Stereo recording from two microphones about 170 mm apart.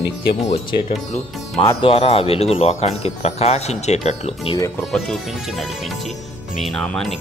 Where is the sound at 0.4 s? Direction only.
40° left (ahead or behind).